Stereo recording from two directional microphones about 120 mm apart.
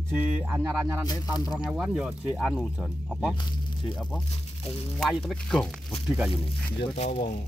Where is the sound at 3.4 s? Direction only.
40° left (ahead or behind).